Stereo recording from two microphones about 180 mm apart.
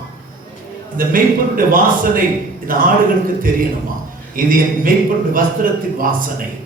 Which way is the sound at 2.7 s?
50° right (ahead or behind).